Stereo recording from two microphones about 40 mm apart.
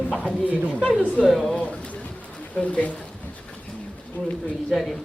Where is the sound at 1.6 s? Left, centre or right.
Left.